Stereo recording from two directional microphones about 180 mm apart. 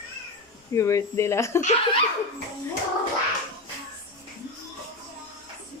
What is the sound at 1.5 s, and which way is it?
Speech, 40° left (ahead or behind).